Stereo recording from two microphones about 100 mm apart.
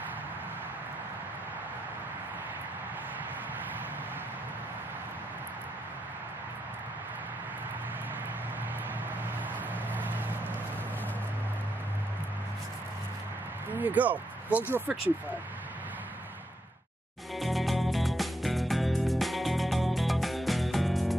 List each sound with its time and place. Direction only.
9.9 s a sound: 15° right (ahead or behind)
13.7 s speech: 15° right (ahead or behind)
17.4 s music: centre (ahead or behind)